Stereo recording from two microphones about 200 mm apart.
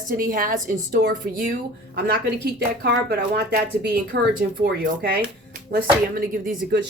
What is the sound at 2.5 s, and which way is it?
A woman's voice, 55° right (ahead or behind).